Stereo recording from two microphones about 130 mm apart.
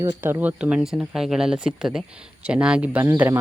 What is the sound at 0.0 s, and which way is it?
Speech, 15° right (ahead or behind).